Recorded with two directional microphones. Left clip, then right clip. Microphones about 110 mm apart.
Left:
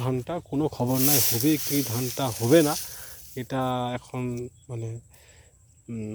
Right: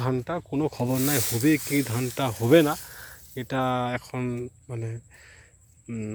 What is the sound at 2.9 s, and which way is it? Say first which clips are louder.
Snake: even; 20° left (ahead or behind).